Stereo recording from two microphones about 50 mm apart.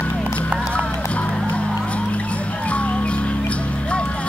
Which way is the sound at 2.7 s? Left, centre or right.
Left.